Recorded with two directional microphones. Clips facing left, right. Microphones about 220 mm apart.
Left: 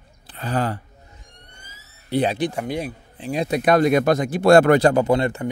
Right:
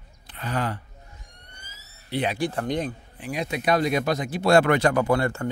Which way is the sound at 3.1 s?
30° left (ahead or behind).